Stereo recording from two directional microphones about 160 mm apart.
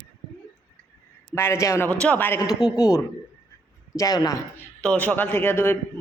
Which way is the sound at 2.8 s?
20° left (ahead or behind).